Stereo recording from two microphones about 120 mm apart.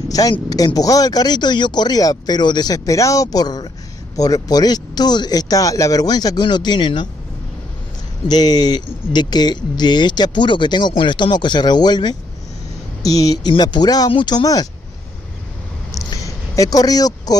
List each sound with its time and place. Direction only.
0.3 s speech: 30° left (ahead or behind)
8.3 s speech: 35° left (ahead or behind)
15.9 s a sound: 30° left (ahead or behind)